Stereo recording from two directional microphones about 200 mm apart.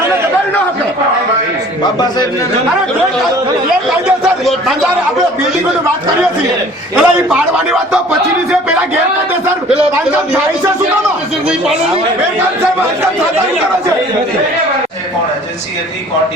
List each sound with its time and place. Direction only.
4.2 s a man's voice: centre (ahead or behind)
6.9 s a man's voice: 5° right (ahead or behind)